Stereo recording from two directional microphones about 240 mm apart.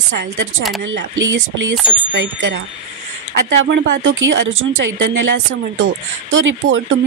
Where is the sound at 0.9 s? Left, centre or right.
Right.